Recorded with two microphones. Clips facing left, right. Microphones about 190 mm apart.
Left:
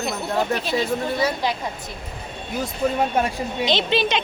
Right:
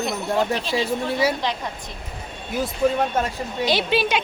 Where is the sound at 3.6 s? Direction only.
10° right (ahead or behind).